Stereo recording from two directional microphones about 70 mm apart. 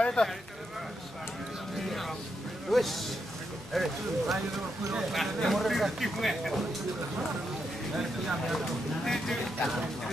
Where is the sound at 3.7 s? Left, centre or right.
Centre.